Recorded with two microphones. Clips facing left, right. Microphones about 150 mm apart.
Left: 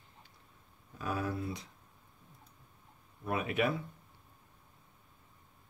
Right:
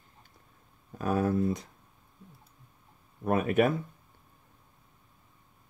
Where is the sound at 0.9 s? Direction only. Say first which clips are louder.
Right 9 dB; 45° right (ahead or behind).